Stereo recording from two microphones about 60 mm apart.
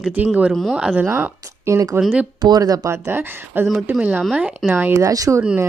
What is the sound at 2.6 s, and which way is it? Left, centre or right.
Speech, right.